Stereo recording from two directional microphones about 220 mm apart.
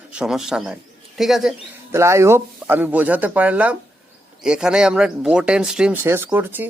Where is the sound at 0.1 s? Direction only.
5° right (ahead or behind).